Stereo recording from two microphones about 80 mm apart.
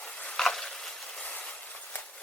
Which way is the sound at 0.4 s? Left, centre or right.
Centre.